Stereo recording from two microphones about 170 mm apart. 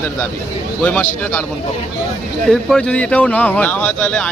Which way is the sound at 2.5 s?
5° left (ahead or behind).